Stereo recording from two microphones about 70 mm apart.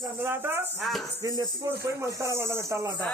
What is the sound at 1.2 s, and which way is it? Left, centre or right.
Speech, right.